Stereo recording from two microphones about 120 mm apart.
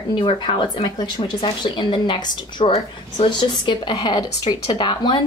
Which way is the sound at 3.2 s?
40° left (ahead or behind).